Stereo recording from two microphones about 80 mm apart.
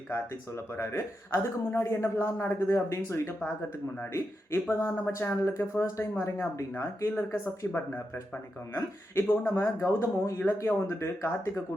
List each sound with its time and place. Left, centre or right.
0.1 s speech: left
4.7 s speech: left
8.7 s speech: left